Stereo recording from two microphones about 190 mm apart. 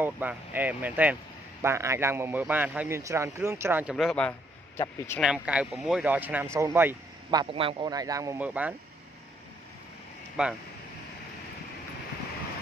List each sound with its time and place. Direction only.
0.0 s a man's voice: 10° right (ahead or behind)
3.9 s a man's voice: 5° left (ahead or behind)
5.2 s a man's voice: 5° right (ahead or behind)
7.2 s a man's voice: 25° right (ahead or behind); by 8.7 s 10° right (ahead or behind)
10.4 s speech: 5° right (ahead or behind)